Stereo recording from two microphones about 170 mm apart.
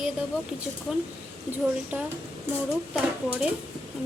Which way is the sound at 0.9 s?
5° right (ahead or behind).